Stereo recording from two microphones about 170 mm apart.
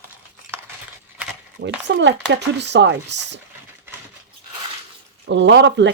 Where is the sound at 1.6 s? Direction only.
90° right.